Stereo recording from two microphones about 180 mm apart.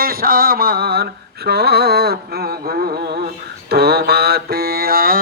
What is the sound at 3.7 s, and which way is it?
Mantra, 60° right (ahead or behind).